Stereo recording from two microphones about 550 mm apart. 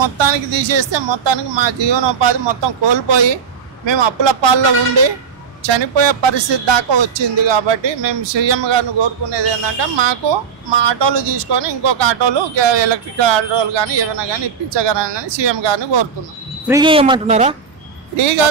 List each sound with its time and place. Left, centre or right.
0.0 s speech: right
16.6 s speech: centre
18.1 s speech: right